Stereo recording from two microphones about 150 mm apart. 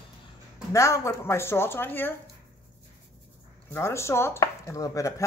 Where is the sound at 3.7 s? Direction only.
20° left (ahead or behind).